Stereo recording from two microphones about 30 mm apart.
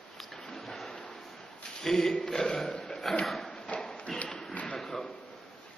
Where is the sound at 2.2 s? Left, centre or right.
Left.